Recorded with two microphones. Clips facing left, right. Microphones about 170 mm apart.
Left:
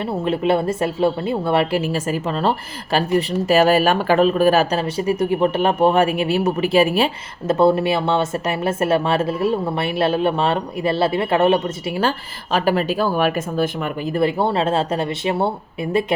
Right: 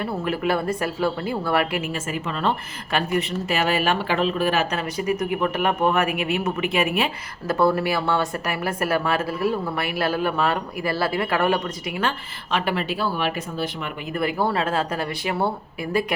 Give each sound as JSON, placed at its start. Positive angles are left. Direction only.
{"t": 0.0, "sound": "a woman's voice", "side_deg": 25}
{"t": 14.1, "sound": "a woman's voice", "side_deg": 30}